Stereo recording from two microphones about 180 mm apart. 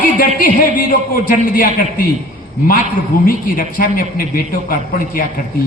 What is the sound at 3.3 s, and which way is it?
Speech, 50° left (ahead or behind).